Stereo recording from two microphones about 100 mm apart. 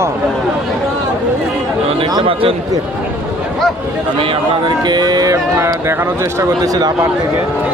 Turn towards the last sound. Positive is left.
turn(degrees=-35)  # may be behind; listen again after turning